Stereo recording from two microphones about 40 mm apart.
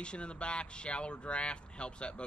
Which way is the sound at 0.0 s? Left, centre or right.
Left.